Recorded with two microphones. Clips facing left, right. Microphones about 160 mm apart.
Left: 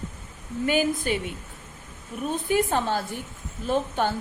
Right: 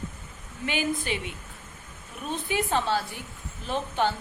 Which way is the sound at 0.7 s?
45° left (ahead or behind).